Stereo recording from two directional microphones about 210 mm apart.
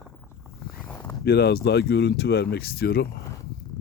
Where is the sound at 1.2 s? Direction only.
50° left (ahead or behind).